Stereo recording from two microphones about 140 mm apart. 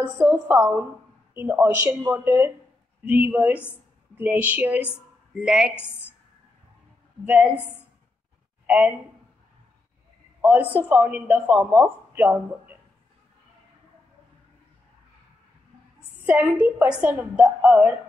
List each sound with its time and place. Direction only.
0.0 s a woman's voice: 15° right (ahead or behind)
7.2 s speech: 10° right (ahead or behind)
8.6 s speech: 10° right (ahead or behind)
10.4 s speech: 15° right (ahead or behind)
16.3 s speech: 15° right (ahead or behind)